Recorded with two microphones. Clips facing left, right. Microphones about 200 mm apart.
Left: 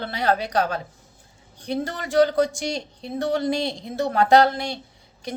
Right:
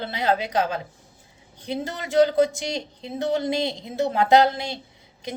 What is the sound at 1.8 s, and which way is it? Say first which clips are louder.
A woman's voice: even; 20° right (ahead or behind).